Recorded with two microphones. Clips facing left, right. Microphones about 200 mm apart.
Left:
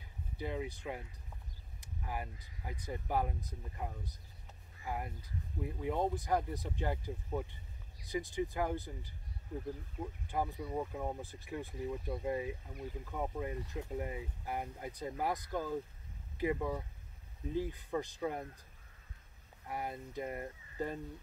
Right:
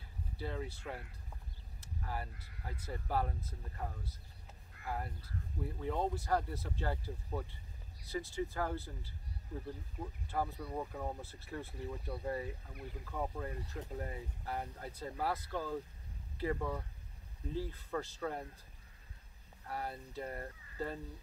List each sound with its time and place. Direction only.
0.4 s speech: 15° left (ahead or behind)
1.8 s vehicle: 15° left (ahead or behind)
2.6 s speech: 15° left (ahead or behind)
10.3 s speech: 10° left (ahead or behind)
19.7 s speech: 15° left (ahead or behind)